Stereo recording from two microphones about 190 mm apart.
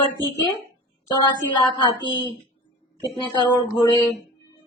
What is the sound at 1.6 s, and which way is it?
Speech, 25° left (ahead or behind).